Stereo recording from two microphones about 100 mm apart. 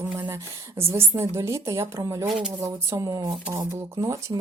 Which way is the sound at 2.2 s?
10° right (ahead or behind).